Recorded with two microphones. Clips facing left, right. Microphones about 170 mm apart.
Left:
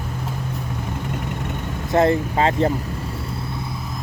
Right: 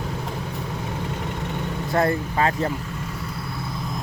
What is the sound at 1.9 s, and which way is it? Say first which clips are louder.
Speech: left 5 dB; 25° left (ahead or behind).